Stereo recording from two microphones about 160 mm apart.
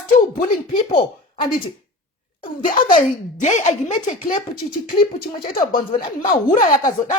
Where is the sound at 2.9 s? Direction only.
50° left (ahead or behind).